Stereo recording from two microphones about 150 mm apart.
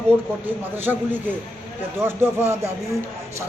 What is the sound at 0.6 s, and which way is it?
A man's voice, 10° right (ahead or behind).